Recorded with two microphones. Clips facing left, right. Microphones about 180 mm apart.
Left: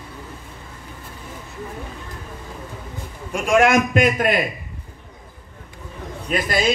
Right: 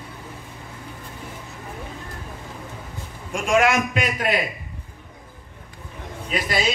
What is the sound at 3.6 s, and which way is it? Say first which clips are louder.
Speech: left 5 dB; 50° left (ahead or behind).